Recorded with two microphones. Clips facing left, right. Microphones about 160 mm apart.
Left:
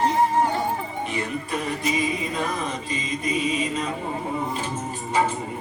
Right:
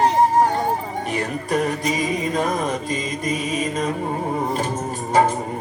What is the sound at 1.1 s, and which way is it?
Music, 45° right (ahead or behind).